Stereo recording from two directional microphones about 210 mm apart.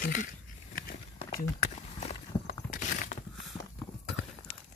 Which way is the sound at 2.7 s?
35° left (ahead or behind).